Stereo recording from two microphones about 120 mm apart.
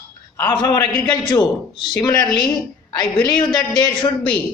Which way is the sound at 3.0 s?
35° left (ahead or behind).